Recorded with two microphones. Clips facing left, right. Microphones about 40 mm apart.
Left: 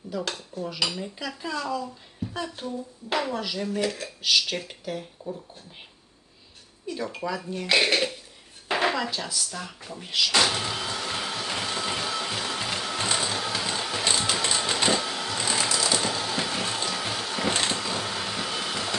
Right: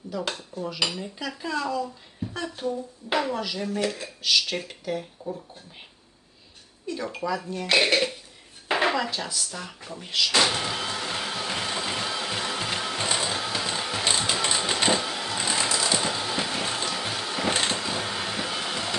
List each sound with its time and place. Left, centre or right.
0.3 s speech: centre
6.8 s speech: centre
8.6 s a sound: centre